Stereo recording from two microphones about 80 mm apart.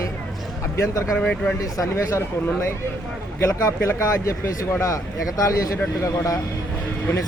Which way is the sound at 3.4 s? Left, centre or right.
Left.